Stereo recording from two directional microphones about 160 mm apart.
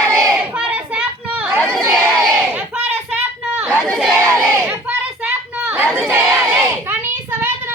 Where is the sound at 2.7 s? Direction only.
10° right (ahead or behind).